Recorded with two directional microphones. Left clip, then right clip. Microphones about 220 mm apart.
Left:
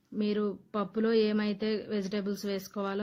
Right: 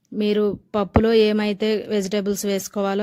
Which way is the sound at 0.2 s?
45° right (ahead or behind).